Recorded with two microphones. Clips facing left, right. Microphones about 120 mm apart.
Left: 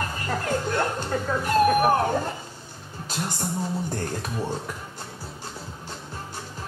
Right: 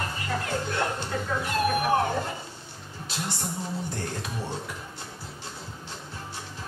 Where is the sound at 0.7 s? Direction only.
45° left (ahead or behind).